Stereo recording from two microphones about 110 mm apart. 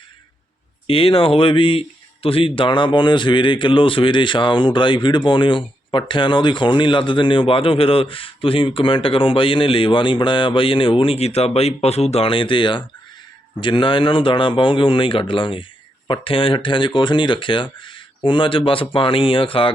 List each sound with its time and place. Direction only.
0.9 s speech: 55° left (ahead or behind)